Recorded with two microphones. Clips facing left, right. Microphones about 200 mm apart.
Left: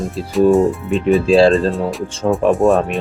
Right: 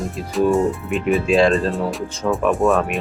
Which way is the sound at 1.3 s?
35° left (ahead or behind).